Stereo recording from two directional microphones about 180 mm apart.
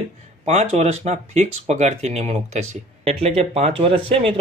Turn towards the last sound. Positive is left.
turn(degrees=-30)  # may be behind; listen again after turning